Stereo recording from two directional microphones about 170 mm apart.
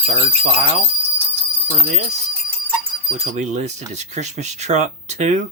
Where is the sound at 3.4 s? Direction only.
45° right (ahead or behind).